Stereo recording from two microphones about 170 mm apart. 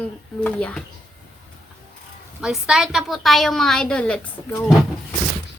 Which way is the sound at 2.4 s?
Centre (ahead or behind).